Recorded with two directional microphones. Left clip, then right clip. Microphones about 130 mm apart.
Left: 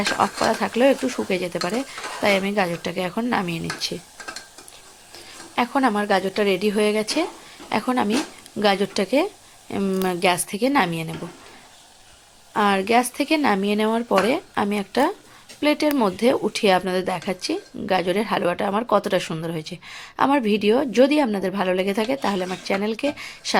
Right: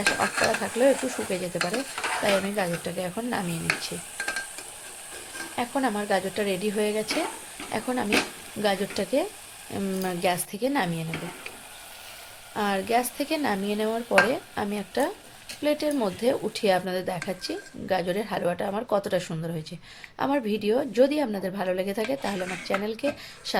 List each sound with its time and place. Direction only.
0.2 s speech: 15° left (ahead or behind)
5.5 s speech: 15° left (ahead or behind)
12.5 s speech: 20° left (ahead or behind)